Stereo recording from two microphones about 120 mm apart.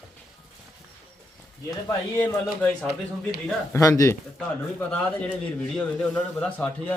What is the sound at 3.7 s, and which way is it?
Speech, 25° left (ahead or behind).